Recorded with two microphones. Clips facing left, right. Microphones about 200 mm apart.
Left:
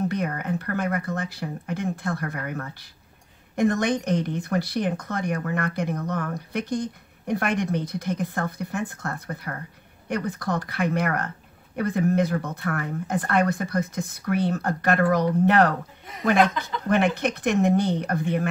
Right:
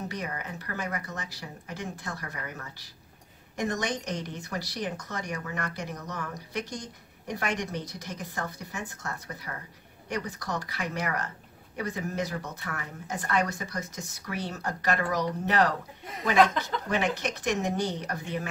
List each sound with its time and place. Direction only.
0.1 s speech: 55° left (ahead or behind)